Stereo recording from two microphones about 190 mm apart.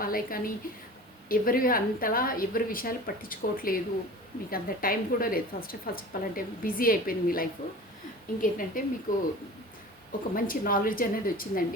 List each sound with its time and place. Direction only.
0.0 s a woman's voice: 50° left (ahead or behind)